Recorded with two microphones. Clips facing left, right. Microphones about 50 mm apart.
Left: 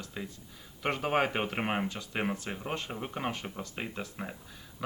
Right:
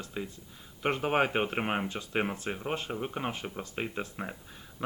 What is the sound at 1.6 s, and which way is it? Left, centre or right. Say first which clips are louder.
Speech: right 1 dB; centre.